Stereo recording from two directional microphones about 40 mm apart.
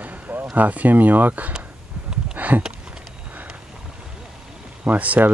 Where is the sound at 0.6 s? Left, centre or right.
Right.